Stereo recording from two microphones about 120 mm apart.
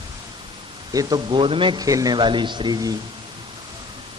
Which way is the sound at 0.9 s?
30° right (ahead or behind).